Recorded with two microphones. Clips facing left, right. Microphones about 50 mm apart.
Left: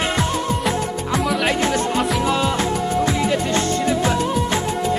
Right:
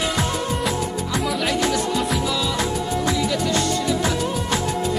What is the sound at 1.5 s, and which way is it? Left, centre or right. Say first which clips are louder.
Music: left 2 dB; left.